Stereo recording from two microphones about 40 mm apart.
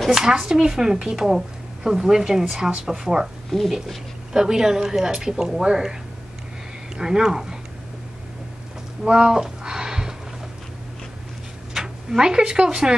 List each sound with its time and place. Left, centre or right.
0.1 s speech: centre
4.3 s speech: centre
7.0 s speech: centre
9.0 s a sound: right
11.7 s speech: centre